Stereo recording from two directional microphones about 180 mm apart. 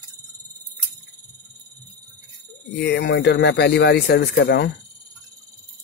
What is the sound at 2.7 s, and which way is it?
Speech, 70° left (ahead or behind).